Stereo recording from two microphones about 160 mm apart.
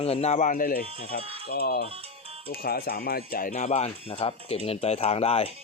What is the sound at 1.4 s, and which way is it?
Speech, 85° left.